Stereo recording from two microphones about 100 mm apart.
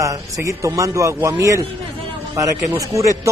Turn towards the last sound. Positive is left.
turn(degrees=-30)  # may be behind; listen again after turning